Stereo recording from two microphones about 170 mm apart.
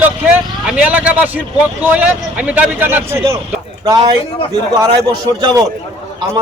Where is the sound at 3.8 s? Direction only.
25° right (ahead or behind).